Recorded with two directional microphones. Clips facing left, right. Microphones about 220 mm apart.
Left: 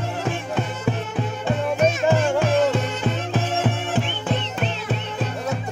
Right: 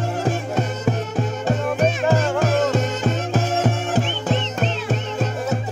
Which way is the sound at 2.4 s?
45° right (ahead or behind).